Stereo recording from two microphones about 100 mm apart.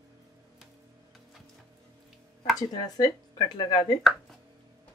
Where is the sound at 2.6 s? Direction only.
40° left (ahead or behind).